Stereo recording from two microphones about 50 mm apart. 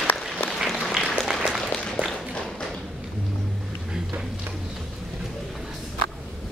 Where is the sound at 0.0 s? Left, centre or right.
Left.